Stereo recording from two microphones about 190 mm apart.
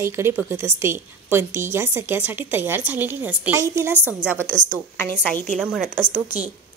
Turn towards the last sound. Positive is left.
turn(degrees=0)  # may be behind; listen again after turning